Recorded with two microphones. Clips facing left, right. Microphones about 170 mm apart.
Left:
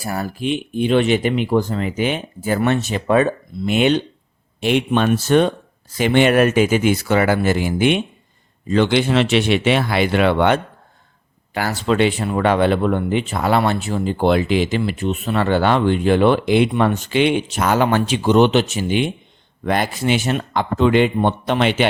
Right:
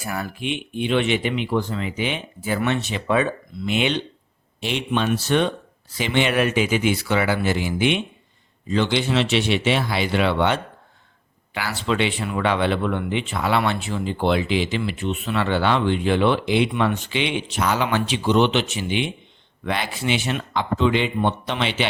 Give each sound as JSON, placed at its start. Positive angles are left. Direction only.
{"t": 0.0, "sound": "speech", "side_deg": 35}